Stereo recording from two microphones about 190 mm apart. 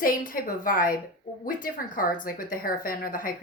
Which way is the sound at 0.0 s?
50° left (ahead or behind).